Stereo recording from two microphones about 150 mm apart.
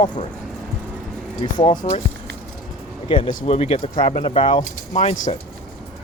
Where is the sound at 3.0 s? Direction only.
35° left (ahead or behind).